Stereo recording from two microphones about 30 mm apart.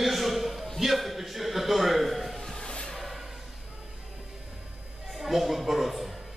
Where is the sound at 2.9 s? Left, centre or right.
Centre.